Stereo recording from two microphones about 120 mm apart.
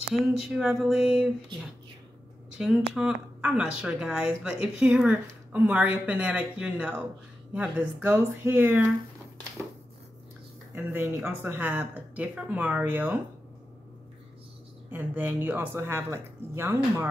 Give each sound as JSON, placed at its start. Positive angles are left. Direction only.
{"t": 0.1, "sound": "a sound", "side_deg": 0}
{"t": 2.9, "sound": "speech", "side_deg": -5}
{"t": 10.7, "sound": "speech", "side_deg": -15}
{"t": 14.9, "sound": "speech", "side_deg": -15}